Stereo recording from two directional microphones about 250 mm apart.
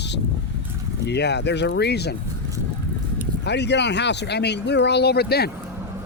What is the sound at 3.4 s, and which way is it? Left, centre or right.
Speech, left.